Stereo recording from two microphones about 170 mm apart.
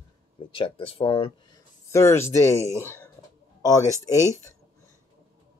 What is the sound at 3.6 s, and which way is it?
Speech, 20° left (ahead or behind).